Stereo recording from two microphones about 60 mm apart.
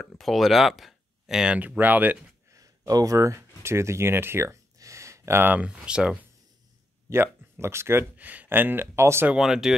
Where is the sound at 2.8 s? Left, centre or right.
Right.